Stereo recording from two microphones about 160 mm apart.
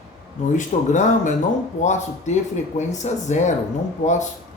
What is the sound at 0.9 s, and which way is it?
A man's voice, 50° left (ahead or behind).